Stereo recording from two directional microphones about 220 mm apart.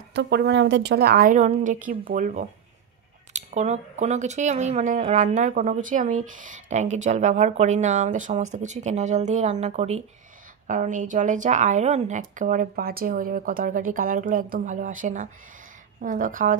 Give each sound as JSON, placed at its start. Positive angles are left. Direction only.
{"t": 0.1, "sound": "speech", "side_deg": -55}